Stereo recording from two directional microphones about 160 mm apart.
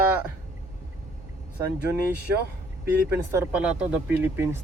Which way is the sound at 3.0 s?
15° right (ahead or behind).